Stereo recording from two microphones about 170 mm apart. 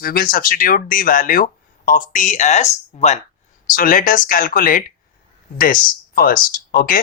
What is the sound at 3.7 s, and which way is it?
Speech, 55° left (ahead or behind).